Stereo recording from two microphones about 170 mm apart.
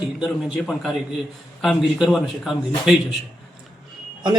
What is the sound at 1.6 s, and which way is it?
A man's voice, centre (ahead or behind).